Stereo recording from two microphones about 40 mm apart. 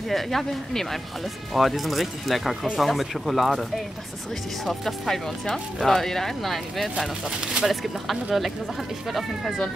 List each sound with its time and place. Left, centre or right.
0.1 s speech: centre
7.2 s speech: right
7.6 s speech: centre